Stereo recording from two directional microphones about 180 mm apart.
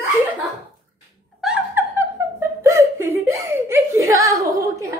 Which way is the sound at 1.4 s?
5° right (ahead or behind).